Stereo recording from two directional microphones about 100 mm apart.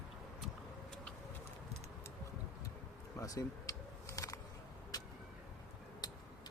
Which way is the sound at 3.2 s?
35° left (ahead or behind).